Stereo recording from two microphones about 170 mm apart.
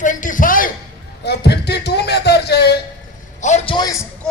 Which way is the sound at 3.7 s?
25° left (ahead or behind).